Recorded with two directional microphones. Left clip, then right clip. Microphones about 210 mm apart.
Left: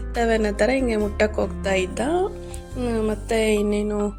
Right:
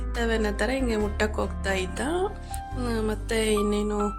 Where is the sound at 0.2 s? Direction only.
10° left (ahead or behind).